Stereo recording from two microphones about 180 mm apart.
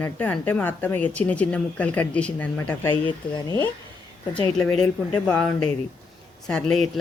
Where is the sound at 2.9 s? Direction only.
25° left (ahead or behind).